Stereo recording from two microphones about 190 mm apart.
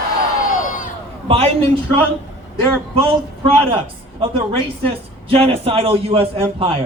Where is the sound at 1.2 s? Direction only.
30° right (ahead or behind).